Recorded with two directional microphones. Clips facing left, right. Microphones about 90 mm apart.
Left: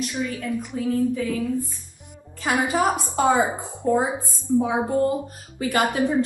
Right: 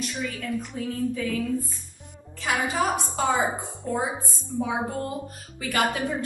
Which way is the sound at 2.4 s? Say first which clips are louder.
Left 4 dB; 35° left (ahead or behind).